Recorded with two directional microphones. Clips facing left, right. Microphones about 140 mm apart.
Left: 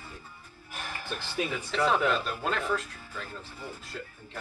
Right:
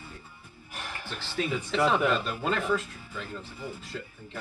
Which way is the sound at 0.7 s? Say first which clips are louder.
Even; centre (ahead or behind).